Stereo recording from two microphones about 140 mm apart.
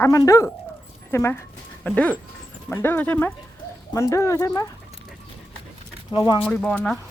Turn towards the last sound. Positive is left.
turn(degrees=5)  # may be behind; listen again after turning